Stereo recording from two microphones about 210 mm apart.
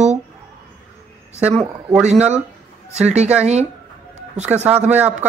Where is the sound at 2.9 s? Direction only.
30° right (ahead or behind).